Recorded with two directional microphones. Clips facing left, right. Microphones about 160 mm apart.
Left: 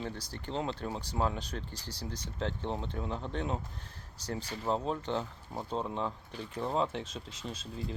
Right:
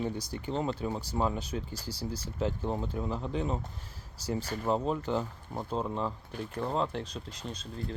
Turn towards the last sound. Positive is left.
turn(degrees=5)  # may be behind; listen again after turning